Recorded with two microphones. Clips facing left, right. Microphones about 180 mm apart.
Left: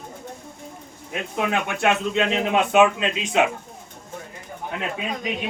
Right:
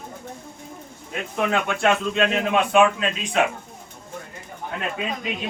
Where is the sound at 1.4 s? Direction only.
20° left (ahead or behind).